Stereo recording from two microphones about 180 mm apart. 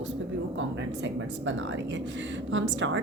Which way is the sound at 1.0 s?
90° right.